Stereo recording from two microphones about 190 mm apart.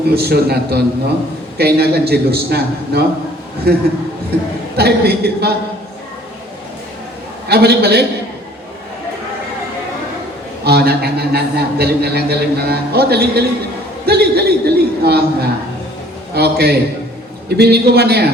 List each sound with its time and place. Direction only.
0.1 s a man's voice: 55° right (ahead or behind)
7.4 s a man's voice: 60° right (ahead or behind)
10.6 s a man's voice: 55° right (ahead or behind)